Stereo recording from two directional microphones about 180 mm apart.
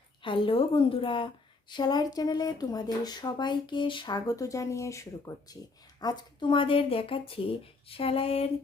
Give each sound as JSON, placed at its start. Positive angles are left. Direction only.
{"t": 0.2, "sound": "a woman's voice", "side_deg": 30}